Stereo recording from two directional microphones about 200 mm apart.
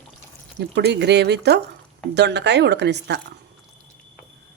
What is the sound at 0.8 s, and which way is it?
Speech, 60° right (ahead or behind).